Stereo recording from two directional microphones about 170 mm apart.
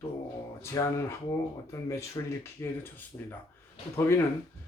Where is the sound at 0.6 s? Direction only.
15° left (ahead or behind).